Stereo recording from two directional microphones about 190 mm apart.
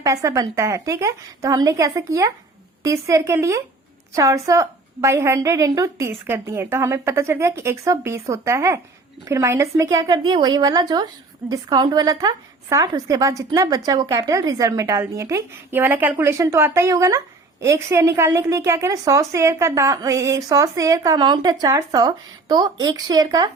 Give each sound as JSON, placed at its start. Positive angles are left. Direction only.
{"t": 0.0, "sound": "a woman's voice", "side_deg": -15}